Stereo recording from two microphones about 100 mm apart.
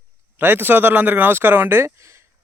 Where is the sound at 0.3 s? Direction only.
20° right (ahead or behind).